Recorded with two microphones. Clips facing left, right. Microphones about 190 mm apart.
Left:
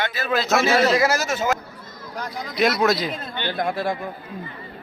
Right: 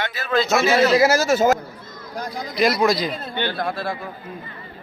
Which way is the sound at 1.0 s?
30° right (ahead or behind).